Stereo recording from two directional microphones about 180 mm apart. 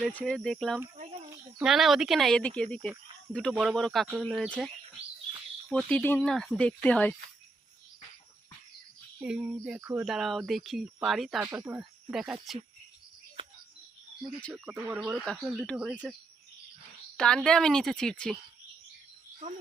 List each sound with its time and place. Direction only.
0.0 s speech: 5° left (ahead or behind)
9.2 s speech: 5° right (ahead or behind)
13.4 s a sound: 30° right (ahead or behind)
14.2 s speech: centre (ahead or behind)
17.2 s speech: 5° left (ahead or behind)